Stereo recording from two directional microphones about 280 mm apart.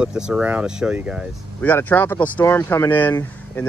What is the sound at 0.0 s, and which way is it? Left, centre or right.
Speech, centre.